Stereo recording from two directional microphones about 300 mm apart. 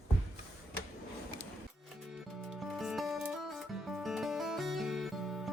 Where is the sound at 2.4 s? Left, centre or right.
Centre.